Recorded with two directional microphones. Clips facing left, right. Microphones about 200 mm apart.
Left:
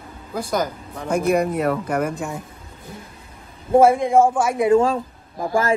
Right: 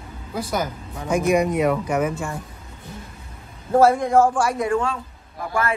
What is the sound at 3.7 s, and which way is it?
A man's voice, 25° left (ahead or behind).